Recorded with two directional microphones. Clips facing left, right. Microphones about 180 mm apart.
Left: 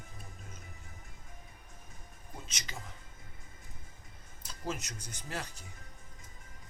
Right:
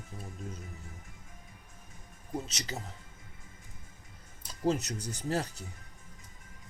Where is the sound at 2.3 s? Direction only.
35° right (ahead or behind).